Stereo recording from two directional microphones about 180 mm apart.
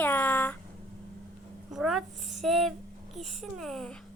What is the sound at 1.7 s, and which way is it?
A child's voice, centre (ahead or behind).